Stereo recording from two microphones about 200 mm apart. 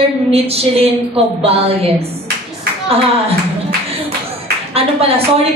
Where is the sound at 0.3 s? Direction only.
30° right (ahead or behind).